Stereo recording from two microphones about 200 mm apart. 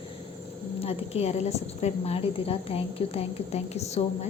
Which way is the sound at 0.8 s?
30° left (ahead or behind).